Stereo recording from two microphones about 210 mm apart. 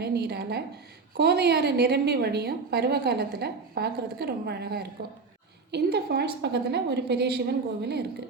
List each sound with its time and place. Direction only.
0.0 s a woman's voice: 50° right (ahead or behind)